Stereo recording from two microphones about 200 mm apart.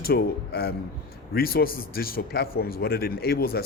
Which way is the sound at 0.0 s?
50° left (ahead or behind).